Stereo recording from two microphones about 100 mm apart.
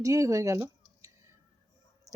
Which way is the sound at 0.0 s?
30° right (ahead or behind).